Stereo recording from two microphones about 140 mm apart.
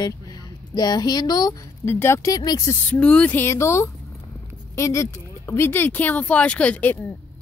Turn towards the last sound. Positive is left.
turn(degrees=10)  # may be behind; listen again after turning